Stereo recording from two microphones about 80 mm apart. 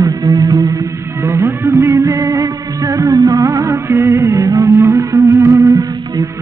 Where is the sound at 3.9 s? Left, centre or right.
Right.